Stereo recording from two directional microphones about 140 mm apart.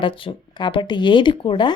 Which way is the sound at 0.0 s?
35° left (ahead or behind).